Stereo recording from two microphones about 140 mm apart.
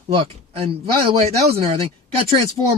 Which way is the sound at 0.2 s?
40° right (ahead or behind).